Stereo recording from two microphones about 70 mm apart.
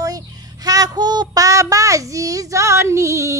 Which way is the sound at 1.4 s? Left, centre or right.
Right.